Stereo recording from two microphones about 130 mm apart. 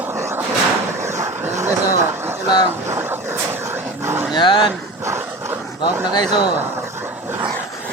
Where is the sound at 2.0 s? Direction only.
20° right (ahead or behind).